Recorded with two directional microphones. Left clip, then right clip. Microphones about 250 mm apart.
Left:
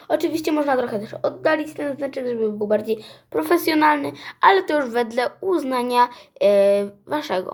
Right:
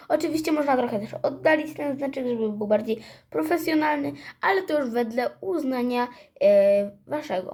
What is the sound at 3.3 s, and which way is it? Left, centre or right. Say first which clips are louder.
Speech: left 5 dB; left.